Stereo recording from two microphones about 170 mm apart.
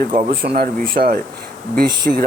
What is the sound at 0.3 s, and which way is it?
Speech, 60° right (ahead or behind).